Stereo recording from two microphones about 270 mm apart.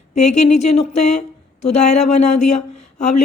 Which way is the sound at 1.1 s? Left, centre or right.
Left.